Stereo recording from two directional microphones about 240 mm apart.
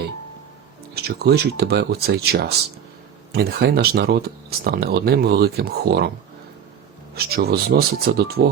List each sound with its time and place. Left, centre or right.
0.9 s speech: right
7.2 s speech: right